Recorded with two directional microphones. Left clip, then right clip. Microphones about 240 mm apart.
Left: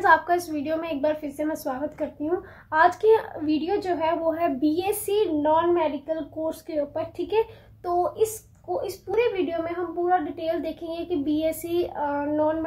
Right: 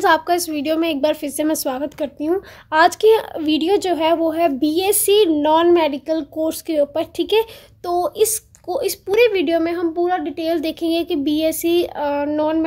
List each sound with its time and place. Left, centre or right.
0.0 s a woman's voice: right